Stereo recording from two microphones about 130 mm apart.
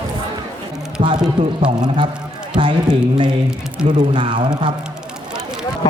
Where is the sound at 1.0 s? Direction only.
60° right (ahead or behind).